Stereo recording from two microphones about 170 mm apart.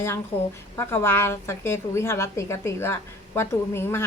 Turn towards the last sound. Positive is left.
turn(degrees=15)  # may be behind; listen again after turning